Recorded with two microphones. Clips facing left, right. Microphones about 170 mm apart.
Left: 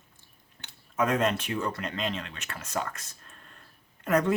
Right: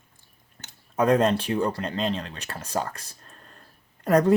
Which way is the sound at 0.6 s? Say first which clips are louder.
Right 6 dB; 35° right (ahead or behind).